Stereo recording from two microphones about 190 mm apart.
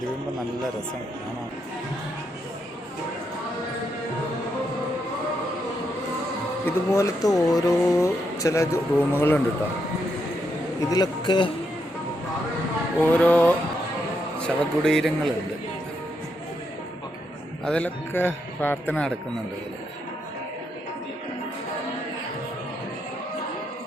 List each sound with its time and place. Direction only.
6.7 s speech: 15° left (ahead or behind)
10.8 s speech: 20° left (ahead or behind)
13.0 s speech: 10° left (ahead or behind)
17.7 s speech: 10° left (ahead or behind)